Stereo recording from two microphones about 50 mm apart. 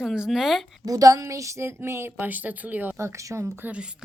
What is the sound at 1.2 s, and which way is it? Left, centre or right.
Speech, right.